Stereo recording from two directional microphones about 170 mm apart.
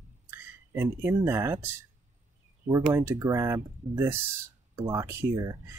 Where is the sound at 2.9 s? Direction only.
15° right (ahead or behind).